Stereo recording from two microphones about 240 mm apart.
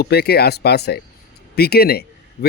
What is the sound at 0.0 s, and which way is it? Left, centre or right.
A man's voice, left.